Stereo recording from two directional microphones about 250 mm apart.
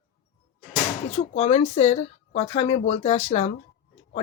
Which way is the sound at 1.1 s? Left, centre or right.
Left.